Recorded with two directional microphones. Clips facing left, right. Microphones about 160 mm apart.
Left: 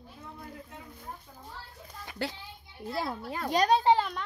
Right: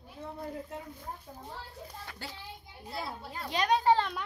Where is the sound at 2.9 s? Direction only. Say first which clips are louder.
Left 6 dB; 65° left (ahead or behind).